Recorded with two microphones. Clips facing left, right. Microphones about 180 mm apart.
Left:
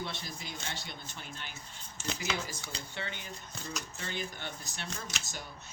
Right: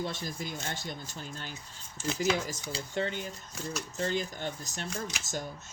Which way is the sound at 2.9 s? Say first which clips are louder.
Right 11 dB; 45° right (ahead or behind).